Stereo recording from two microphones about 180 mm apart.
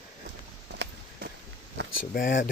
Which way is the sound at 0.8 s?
65° right (ahead or behind).